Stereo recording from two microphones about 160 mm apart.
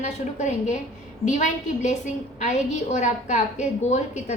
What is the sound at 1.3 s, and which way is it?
A woman's voice, 50° left (ahead or behind).